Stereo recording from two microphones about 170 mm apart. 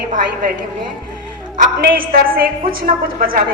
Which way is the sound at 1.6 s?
60° right (ahead or behind).